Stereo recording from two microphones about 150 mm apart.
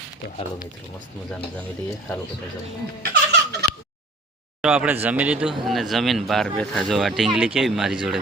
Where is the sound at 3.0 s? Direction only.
90° right.